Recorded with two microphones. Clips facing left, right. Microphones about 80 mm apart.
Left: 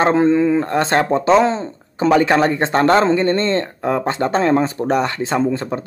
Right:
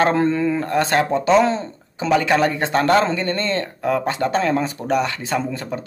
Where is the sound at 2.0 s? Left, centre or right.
Left.